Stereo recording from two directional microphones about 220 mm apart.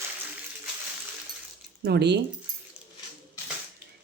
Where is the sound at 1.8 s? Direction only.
50° right (ahead or behind).